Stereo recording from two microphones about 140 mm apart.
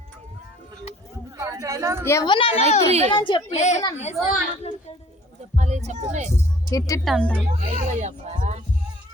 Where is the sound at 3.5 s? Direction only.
55° left (ahead or behind).